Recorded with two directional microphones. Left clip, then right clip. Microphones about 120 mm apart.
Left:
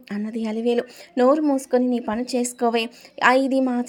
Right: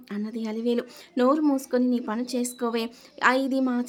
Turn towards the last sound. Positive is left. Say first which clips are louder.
# left 5 dB
turn(degrees=20)  # may be behind; listen again after turning